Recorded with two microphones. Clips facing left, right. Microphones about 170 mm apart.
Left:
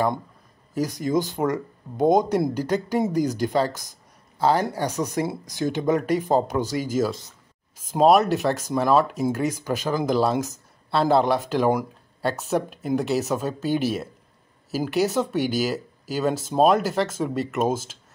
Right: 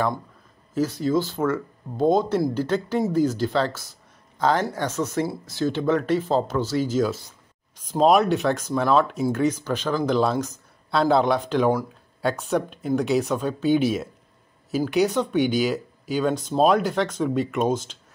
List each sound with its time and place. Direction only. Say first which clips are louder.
0.7 s speech: right 1 dB; 15° left (ahead or behind)